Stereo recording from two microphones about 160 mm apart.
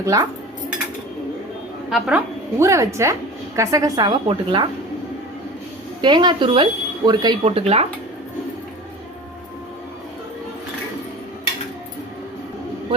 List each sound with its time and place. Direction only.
0.0 s a woman's voice: 20° right (ahead or behind)
1.9 s a woman's voice: 5° right (ahead or behind)
2.6 s a woman's voice: 20° right (ahead or behind)
6.0 s a woman's voice: 30° right (ahead or behind)
7.4 s speech: 40° right (ahead or behind)